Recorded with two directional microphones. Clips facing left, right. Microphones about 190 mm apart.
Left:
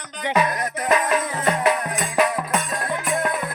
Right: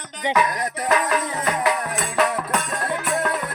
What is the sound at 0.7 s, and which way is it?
Music, 20° left (ahead or behind).